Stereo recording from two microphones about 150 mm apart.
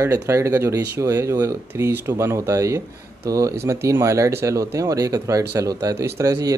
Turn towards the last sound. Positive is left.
turn(degrees=-20)  # may be behind; listen again after turning